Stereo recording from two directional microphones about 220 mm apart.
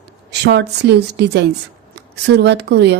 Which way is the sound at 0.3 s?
50° right (ahead or behind).